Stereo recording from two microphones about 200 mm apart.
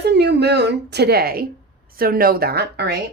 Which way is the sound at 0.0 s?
55° right (ahead or behind).